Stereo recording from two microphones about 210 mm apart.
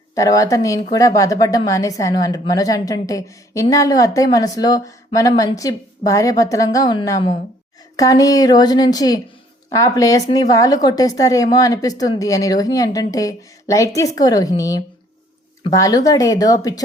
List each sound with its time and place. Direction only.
0.1 s a woman's voice: 15° left (ahead or behind)